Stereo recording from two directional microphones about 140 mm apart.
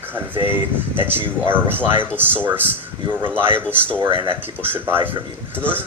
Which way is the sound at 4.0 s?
35° right (ahead or behind).